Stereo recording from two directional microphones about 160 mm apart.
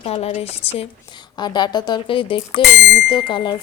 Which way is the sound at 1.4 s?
25° left (ahead or behind).